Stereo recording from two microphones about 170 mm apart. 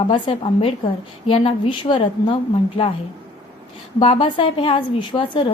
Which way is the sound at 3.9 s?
35° left (ahead or behind).